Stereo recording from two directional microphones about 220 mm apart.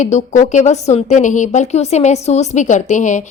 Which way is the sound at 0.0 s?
35° left (ahead or behind).